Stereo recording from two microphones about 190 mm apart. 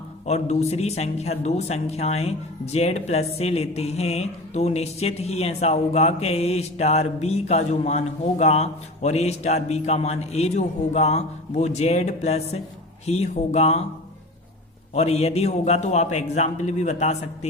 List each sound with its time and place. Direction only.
0.3 s a man's voice: 35° left (ahead or behind)
14.9 s a man's voice: 35° left (ahead or behind)